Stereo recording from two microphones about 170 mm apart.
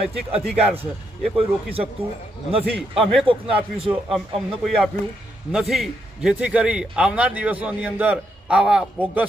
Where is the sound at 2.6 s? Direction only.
Centre (ahead or behind).